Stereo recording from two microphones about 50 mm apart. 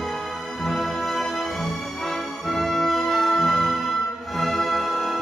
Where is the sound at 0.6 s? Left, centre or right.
Centre.